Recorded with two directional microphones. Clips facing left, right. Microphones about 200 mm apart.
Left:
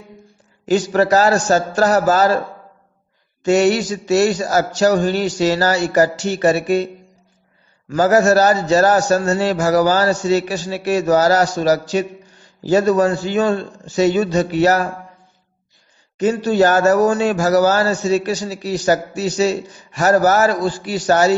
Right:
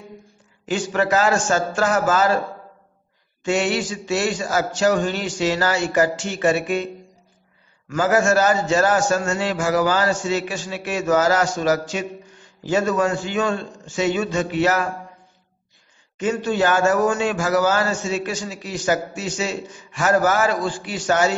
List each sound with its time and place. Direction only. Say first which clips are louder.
0.7 s a man's voice: left 6 dB; 40° left (ahead or behind)
3.4 s a man's voice: left 7 dB; 40° left (ahead or behind)
7.9 s a man's voice: left 5 dB; 40° left (ahead or behind)
16.2 s a man's voice: left 6 dB; 35° left (ahead or behind)